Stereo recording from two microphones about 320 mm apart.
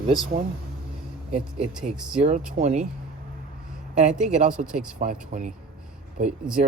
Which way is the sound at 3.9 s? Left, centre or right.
Right.